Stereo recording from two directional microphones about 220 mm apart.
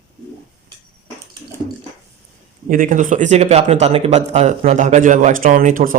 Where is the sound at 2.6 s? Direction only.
40° right (ahead or behind).